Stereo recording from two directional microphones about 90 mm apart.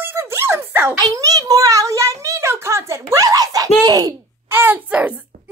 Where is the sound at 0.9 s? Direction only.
45° right (ahead or behind).